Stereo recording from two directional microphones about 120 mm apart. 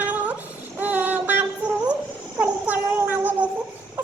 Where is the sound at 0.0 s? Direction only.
10° right (ahead or behind).